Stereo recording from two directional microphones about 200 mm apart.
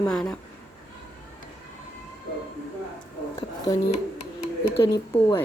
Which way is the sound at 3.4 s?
20° left (ahead or behind).